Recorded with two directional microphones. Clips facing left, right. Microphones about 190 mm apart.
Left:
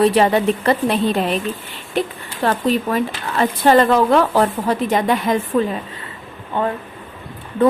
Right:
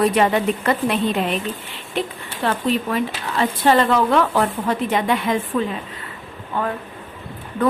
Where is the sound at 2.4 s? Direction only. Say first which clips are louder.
Left 3 dB; 45° left (ahead or behind).